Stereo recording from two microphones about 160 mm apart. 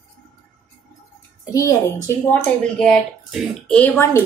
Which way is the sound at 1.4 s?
20° left (ahead or behind).